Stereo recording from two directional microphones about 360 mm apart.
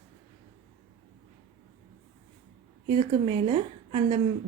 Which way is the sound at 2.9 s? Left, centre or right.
Centre.